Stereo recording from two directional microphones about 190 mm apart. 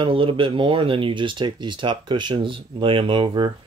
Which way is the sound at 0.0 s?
30° right (ahead or behind).